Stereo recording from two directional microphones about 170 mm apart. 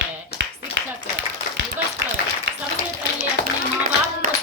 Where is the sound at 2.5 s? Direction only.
90° right.